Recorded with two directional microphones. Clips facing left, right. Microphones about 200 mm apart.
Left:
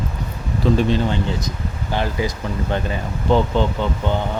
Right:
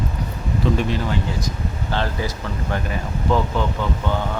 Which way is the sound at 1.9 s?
15° left (ahead or behind).